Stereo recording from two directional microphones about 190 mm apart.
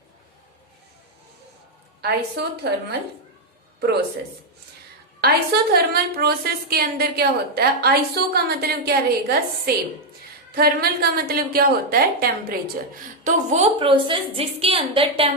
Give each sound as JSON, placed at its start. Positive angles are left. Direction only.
{"t": 2.0, "sound": "a woman's voice", "side_deg": -60}
{"t": 5.2, "sound": "a woman's voice", "side_deg": -55}
{"t": 13.2, "sound": "a woman's voice", "side_deg": -40}